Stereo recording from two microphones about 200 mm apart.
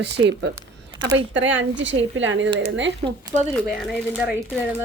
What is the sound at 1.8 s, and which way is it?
A woman's voice, 65° right (ahead or behind).